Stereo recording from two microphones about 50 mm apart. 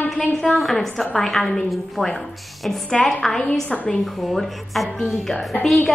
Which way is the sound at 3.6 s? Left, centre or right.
Left.